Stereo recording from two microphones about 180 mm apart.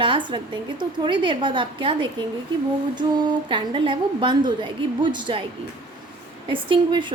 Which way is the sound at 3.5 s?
25° right (ahead or behind).